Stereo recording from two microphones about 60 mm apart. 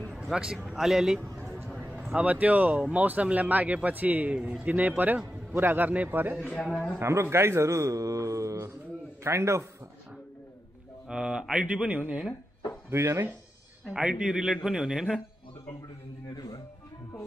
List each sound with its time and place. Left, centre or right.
0.2 s a man's voice: centre
2.1 s a man's voice: right
6.4 s speech: centre
7.0 s a man's voice: right
11.1 s a man's voice: centre
12.9 s a man's voice: right
13.8 s speech: centre